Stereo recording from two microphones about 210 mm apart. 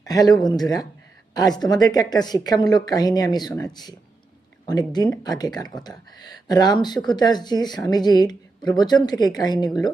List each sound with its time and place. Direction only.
0.0 s speech: 15° left (ahead or behind)